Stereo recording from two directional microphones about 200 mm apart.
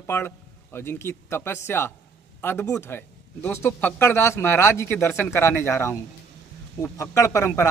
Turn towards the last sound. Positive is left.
turn(degrees=15)  # may be behind; listen again after turning